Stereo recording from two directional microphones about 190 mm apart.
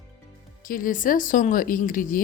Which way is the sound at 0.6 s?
45° left (ahead or behind).